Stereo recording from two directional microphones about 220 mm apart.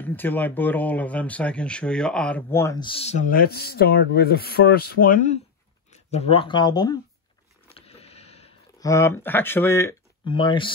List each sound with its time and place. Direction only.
0.0 s speech: 10° left (ahead or behind)
7.7 s a sound: 25° left (ahead or behind)
8.7 s speech: 15° left (ahead or behind)
10.2 s speech: 25° left (ahead or behind)